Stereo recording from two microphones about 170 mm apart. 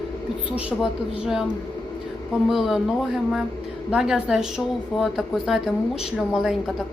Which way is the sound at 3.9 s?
5° right (ahead or behind).